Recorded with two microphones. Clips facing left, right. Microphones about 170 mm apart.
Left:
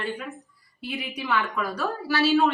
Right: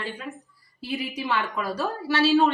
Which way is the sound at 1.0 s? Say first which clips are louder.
Left 1 dB; 30° right (ahead or behind).